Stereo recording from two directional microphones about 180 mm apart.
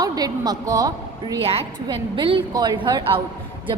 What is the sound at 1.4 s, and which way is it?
A woman's voice, 35° right (ahead or behind).